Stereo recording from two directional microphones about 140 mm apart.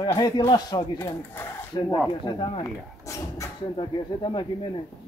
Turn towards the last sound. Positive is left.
turn(degrees=35)  # may be behind; listen again after turning